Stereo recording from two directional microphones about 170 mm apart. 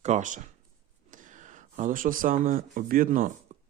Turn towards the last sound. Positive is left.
turn(degrees=-45)  # may be behind; listen again after turning